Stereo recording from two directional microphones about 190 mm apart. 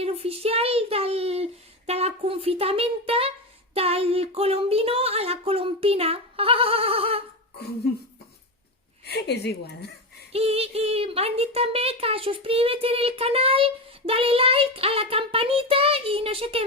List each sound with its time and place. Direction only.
0.0 s child singing: 30° right (ahead or behind)
9.0 s a woman's voice: 60° left (ahead or behind)
10.3 s speech: 30° right (ahead or behind)